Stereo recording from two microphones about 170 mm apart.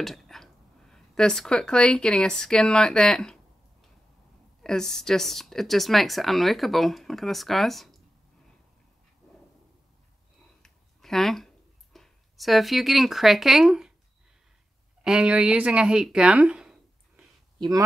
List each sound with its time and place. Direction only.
0.0 s speech: centre (ahead or behind)
4.6 s speech: 5° left (ahead or behind)
10.6 s a sound: centre (ahead or behind)
15.0 s speech: 5° right (ahead or behind)
17.6 s speech: 20° right (ahead or behind)